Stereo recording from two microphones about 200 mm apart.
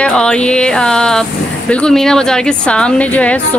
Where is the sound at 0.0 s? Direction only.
5° left (ahead or behind).